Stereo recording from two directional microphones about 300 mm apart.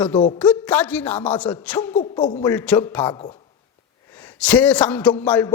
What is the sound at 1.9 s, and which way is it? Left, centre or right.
Speech, centre.